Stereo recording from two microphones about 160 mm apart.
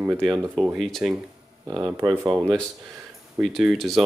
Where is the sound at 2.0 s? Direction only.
20° right (ahead or behind).